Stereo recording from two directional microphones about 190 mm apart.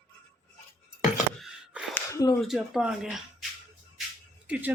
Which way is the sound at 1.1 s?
5° right (ahead or behind).